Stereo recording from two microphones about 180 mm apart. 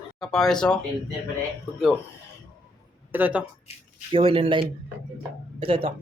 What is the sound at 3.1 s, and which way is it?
Speech, 10° right (ahead or behind).